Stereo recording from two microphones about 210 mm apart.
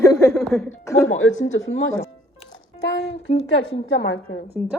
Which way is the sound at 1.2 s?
65° left (ahead or behind).